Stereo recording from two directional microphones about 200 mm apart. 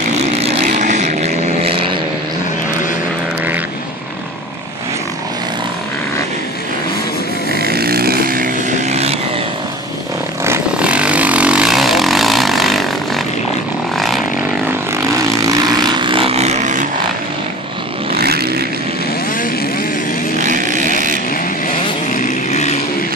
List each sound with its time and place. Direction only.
0.2 s vehicle: 30° right (ahead or behind)
7.5 s vehicle: 50° right (ahead or behind)
10.4 s vehicle: 10° right (ahead or behind)
16.0 s vehicle: 25° right (ahead or behind)
18.1 s vehicle: 50° right (ahead or behind)
20.3 s vehicle: 40° right (ahead or behind)
22.1 s a sound: 40° left (ahead or behind)